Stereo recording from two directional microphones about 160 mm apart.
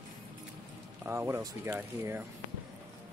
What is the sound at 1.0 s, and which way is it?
Speech, 15° right (ahead or behind).